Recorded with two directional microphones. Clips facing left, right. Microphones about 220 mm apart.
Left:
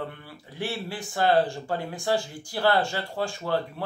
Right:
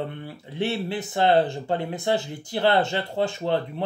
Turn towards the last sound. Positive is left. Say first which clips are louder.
# right 3 dB
turn(degrees=-25)  # may be behind; listen again after turning